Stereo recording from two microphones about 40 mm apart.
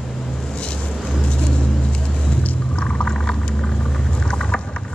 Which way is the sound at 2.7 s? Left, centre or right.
Left.